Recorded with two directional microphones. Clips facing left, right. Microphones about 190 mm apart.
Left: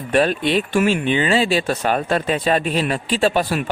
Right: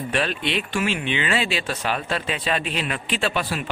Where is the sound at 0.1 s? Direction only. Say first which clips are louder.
Left 9 dB; 45° left (ahead or behind).